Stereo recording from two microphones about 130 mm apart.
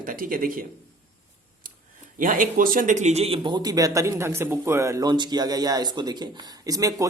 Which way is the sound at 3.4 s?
35° right (ahead or behind).